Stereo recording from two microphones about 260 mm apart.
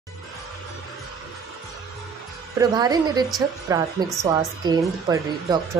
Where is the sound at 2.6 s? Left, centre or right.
Centre.